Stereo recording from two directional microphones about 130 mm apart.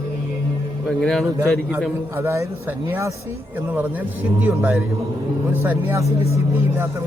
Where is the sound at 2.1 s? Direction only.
20° right (ahead or behind).